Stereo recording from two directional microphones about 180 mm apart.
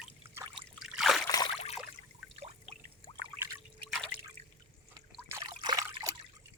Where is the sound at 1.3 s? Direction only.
20° left (ahead or behind).